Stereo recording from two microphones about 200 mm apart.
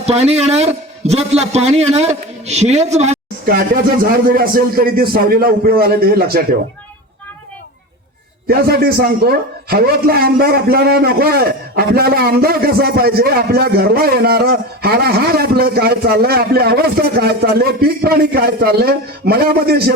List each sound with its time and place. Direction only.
0.0 s a man's voice: 30° right (ahead or behind)
3.5 s a man's voice: 45° right (ahead or behind)
8.4 s a man's voice: 50° right (ahead or behind)